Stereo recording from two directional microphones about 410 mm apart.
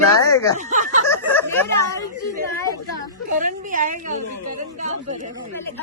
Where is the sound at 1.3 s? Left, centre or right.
Centre.